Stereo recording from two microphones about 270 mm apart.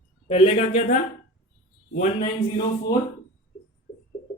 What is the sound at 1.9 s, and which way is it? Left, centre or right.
Speech, centre.